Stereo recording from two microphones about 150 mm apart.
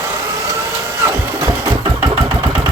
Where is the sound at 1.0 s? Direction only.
20° right (ahead or behind).